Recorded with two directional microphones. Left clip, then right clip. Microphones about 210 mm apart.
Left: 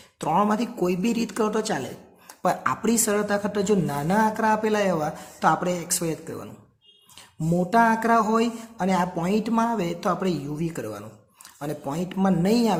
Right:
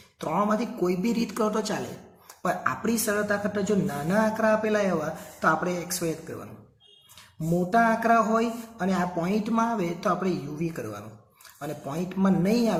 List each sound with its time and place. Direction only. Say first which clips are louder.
0.2 s speech: left 3 dB; 45° left (ahead or behind)
7.7 s speech: left 2 dB; 45° left (ahead or behind)